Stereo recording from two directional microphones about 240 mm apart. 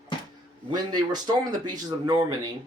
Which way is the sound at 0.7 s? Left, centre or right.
Centre.